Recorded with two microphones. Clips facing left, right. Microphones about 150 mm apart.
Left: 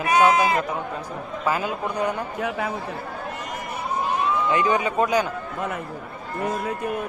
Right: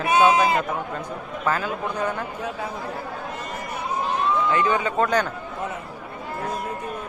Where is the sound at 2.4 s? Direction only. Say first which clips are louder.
Left 4 dB; 70° left (ahead or behind).